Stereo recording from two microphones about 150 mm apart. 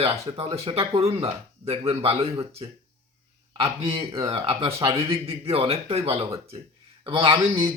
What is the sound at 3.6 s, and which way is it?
Speech, 40° right (ahead or behind).